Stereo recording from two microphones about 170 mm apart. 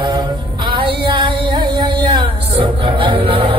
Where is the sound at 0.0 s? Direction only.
25° right (ahead or behind).